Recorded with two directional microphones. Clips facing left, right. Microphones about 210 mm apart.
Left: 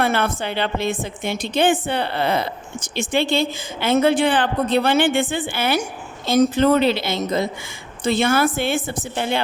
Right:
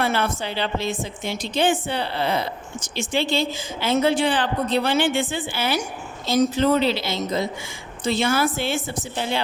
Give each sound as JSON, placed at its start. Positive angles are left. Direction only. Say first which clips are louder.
{"t": 0.0, "sound": "a woman's voice", "louder": "left 3 dB", "side_deg": 55}